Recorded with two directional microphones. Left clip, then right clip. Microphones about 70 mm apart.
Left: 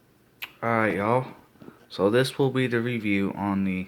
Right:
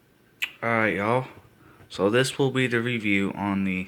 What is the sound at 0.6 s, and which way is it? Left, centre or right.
Speech, centre.